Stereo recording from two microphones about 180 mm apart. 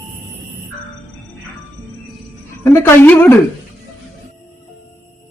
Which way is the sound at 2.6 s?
15° left (ahead or behind).